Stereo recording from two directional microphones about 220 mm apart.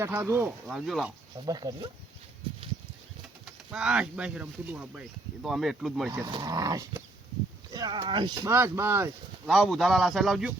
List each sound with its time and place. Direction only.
0.0 s speech: 10° right (ahead or behind)
1.5 s speech: 15° right (ahead or behind)
3.4 s speech: 5° right (ahead or behind)
6.1 s speech: 20° right (ahead or behind)
9.5 s speech: centre (ahead or behind)